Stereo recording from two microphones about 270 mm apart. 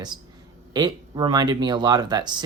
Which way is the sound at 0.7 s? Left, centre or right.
Centre.